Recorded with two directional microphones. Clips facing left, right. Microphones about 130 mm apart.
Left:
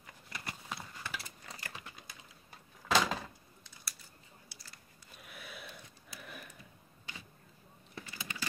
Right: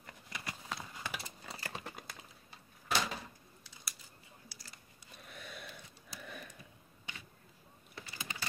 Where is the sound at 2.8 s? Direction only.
90° left.